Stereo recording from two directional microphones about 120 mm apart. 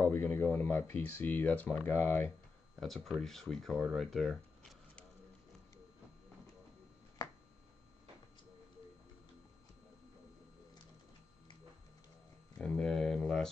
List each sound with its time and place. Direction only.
0.0 s speech: 20° left (ahead or behind)
2.8 s speech: centre (ahead or behind)
12.5 s speech: 5° left (ahead or behind)